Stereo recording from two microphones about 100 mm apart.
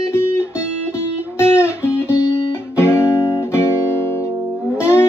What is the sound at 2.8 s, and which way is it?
Guitar, 25° left (ahead or behind).